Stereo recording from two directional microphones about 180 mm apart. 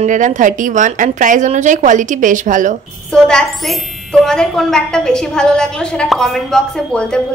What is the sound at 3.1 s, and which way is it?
A woman's voice, 5° left (ahead or behind).